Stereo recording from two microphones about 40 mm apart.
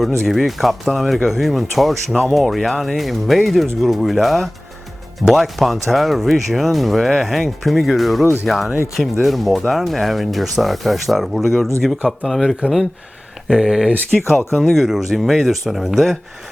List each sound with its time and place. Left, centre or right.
0.0 s speech: centre
8.2 s speech: left
8.4 s speech: centre
12.6 s speech: right
13.5 s speech: centre